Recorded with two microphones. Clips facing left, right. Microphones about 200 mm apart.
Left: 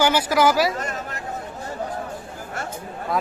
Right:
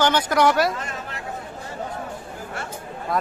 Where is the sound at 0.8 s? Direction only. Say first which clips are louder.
Left 3 dB; 45° left (ahead or behind).